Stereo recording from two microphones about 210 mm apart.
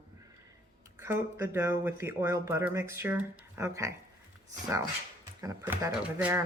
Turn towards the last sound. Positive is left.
turn(degrees=-10)  # may be behind; listen again after turning